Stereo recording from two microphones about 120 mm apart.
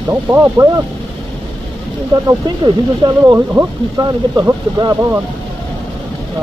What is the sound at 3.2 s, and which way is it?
Speech, 25° right (ahead or behind).